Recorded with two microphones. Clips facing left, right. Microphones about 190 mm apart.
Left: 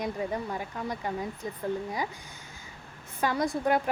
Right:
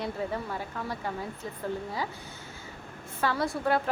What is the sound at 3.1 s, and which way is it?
Speech, 15° left (ahead or behind).